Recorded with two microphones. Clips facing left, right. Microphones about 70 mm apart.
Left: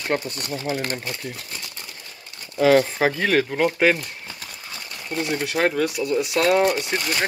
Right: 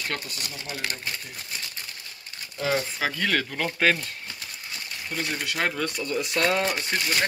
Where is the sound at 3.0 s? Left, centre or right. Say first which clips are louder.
Left 6 dB; left.